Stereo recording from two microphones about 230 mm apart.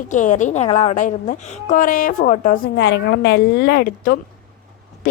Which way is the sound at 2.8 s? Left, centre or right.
Left.